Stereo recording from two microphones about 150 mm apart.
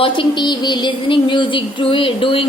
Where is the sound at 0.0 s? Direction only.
30° left (ahead or behind).